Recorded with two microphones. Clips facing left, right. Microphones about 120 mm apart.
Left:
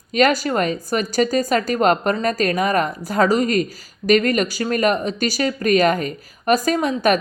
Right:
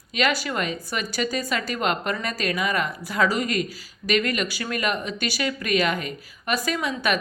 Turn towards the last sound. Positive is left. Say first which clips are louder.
# left 7 dB
turn(degrees=45)  # may be behind; listen again after turning